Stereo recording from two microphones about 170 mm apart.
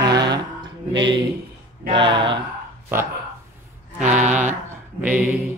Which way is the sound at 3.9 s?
45° right (ahead or behind).